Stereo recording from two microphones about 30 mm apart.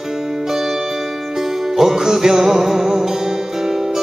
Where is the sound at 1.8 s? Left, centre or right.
Centre.